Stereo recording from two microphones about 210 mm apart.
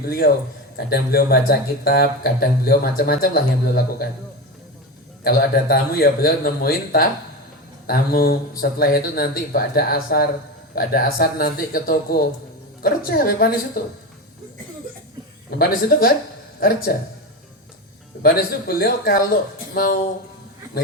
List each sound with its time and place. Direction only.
0.0 s speech: 45° left (ahead or behind)
5.2 s speech: 45° left (ahead or behind)
15.4 s speech: 45° left (ahead or behind)
18.2 s speech: 45° left (ahead or behind)